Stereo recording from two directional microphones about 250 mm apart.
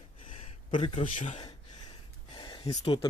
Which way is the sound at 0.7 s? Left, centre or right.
Left.